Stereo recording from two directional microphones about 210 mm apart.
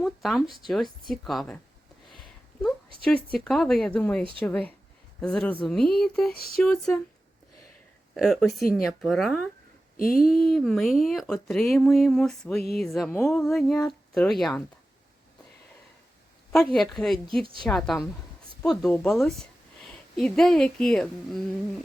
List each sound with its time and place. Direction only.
0.0 s speech: centre (ahead or behind)
2.1 s a sound: centre (ahead or behind)
3.3 s speech: centre (ahead or behind)
6.3 s a sound: 45° left (ahead or behind)
6.6 s speech: centre (ahead or behind)
8.1 s speech: centre (ahead or behind)
10.0 s a sound: 45° left (ahead or behind)
10.2 s speech: centre (ahead or behind)
16.7 s speech: centre (ahead or behind)
17.4 s a woman's voice: 25° right (ahead or behind)
17.7 s a woman's voice: centre (ahead or behind)